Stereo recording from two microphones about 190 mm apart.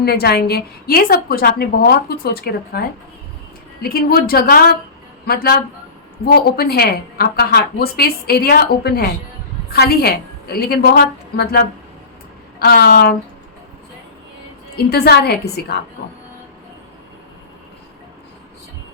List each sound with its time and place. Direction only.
0.0 s a woman's voice: 55° left (ahead or behind)
3.8 s a woman's voice: 50° left (ahead or behind)
14.8 s a woman's voice: 55° left (ahead or behind)